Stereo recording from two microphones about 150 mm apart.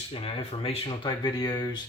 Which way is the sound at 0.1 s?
40° left (ahead or behind).